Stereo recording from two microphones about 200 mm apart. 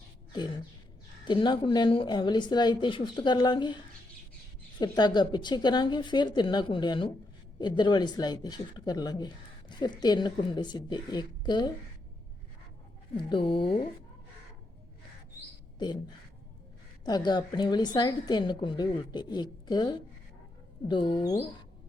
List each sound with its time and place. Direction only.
1.3 s speech: 25° left (ahead or behind)
4.8 s speech: 20° left (ahead or behind)
13.1 s speech: 25° left (ahead or behind)
17.1 s speech: 20° left (ahead or behind)